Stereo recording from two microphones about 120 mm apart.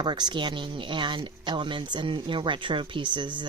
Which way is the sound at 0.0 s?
40° right (ahead or behind).